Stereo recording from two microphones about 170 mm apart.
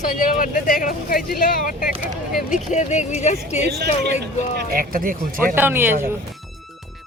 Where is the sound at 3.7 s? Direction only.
75° right (ahead or behind).